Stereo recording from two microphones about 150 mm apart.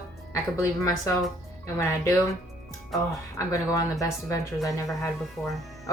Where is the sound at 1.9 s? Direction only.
20° left (ahead or behind).